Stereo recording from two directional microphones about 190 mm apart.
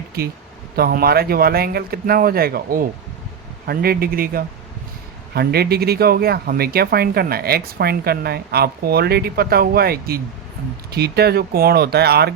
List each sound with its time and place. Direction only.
0.8 s speech: 55° right (ahead or behind)